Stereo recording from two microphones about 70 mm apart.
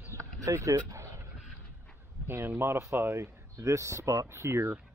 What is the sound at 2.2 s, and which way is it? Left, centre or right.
Speech, right.